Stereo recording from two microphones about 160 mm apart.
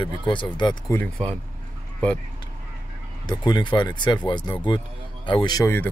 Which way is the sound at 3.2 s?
25° left (ahead or behind).